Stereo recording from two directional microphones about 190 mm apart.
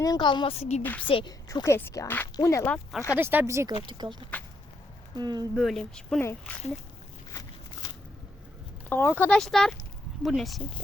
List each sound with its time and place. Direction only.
0.0 s a woman's voice: 20° left (ahead or behind)
0.8 s a woman's voice: 10° left (ahead or behind)
1.0 s a woman's voice: 25° left (ahead or behind)
3.2 s speech: 10° right (ahead or behind)
5.5 s speech: centre (ahead or behind)
8.9 s speech: 10° left (ahead or behind)